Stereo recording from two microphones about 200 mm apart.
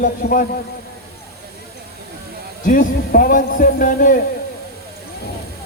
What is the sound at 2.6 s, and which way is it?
A man's voice, 40° left (ahead or behind).